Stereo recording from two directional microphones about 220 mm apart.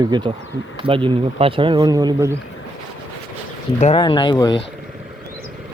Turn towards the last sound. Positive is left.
turn(degrees=20)  # may be behind; listen again after turning